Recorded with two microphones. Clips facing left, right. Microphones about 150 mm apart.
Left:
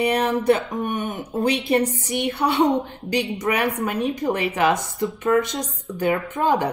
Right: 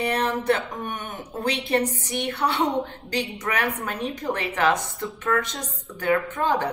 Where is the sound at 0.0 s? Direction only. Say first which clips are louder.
Left 4 dB; 15° left (ahead or behind).